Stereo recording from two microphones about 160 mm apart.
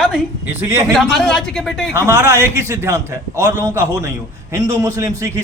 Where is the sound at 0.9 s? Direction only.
Centre (ahead or behind).